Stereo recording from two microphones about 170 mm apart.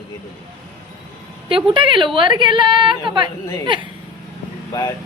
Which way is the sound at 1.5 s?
30° right (ahead or behind).